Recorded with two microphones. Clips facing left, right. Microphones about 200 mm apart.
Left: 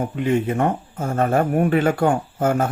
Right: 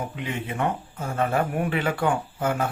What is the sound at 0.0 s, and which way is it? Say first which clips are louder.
Speech: left 11 dB; 45° left (ahead or behind).